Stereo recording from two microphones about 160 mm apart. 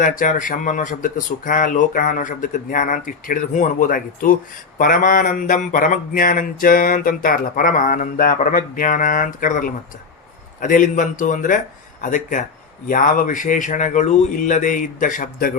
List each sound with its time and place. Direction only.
0.0 s a man's voice: 55° left (ahead or behind)